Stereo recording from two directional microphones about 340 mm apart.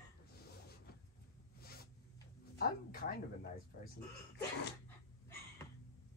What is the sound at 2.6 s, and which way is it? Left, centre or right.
Speech, left.